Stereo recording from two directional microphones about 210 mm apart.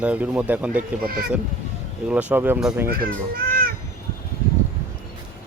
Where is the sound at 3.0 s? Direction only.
45° right (ahead or behind).